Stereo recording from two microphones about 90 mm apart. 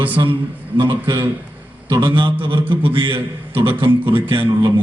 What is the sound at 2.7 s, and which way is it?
Speech, 80° right.